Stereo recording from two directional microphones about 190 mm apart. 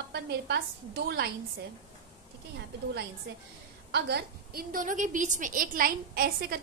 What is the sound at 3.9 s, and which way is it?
A woman's voice, 55° right (ahead or behind).